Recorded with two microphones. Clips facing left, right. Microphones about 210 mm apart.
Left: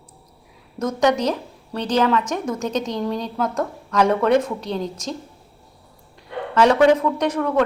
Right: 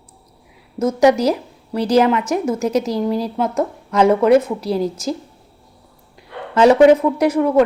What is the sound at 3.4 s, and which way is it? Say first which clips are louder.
Speech: right 4 dB; 25° right (ahead or behind).